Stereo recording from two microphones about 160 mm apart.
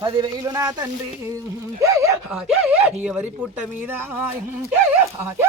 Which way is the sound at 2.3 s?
5° right (ahead or behind).